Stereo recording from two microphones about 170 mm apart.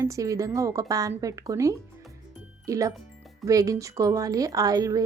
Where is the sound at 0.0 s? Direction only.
20° right (ahead or behind).